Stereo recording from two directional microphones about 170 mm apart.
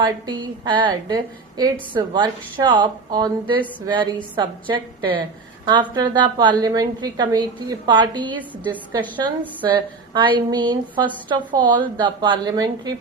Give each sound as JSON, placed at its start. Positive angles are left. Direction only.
{"t": 0.0, "sound": "a woman's voice", "side_deg": -25}